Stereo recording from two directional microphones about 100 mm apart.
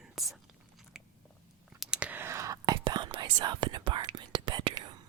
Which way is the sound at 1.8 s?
10° right (ahead or behind).